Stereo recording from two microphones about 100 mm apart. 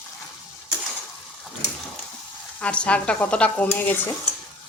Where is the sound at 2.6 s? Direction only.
10° left (ahead or behind).